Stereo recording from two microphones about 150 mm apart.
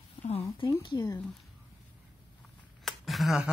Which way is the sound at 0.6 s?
25° left (ahead or behind).